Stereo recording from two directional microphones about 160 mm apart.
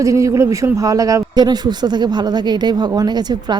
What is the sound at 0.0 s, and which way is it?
Speech, 20° right (ahead or behind).